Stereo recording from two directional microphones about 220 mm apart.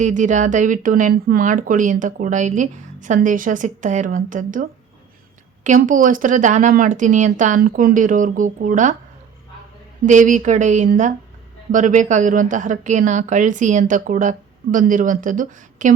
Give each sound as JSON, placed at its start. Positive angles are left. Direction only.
{"t": 0.0, "sound": "speech", "side_deg": -35}
{"t": 5.6, "sound": "speech", "side_deg": -35}
{"t": 10.1, "sound": "speech", "side_deg": -35}